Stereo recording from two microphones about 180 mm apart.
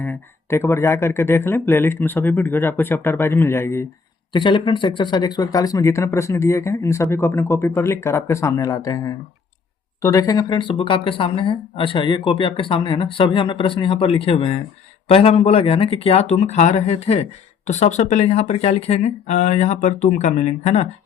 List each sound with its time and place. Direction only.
0.0 s speech: 10° left (ahead or behind)
4.3 s speech: 25° left (ahead or behind)